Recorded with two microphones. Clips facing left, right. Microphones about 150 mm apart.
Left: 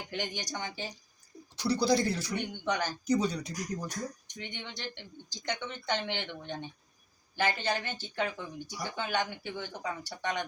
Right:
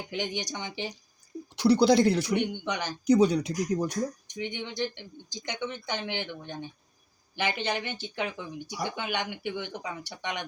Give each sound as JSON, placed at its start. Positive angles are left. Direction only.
{"t": 0.1, "sound": "speech", "side_deg": -15}
{"t": 1.5, "sound": "speech", "side_deg": -65}
{"t": 2.6, "sound": "speech", "side_deg": -15}
{"t": 3.1, "sound": "speech", "side_deg": -65}
{"t": 4.4, "sound": "speech", "side_deg": -15}